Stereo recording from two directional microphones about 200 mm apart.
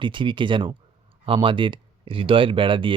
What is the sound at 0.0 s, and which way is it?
Speech, 25° right (ahead or behind).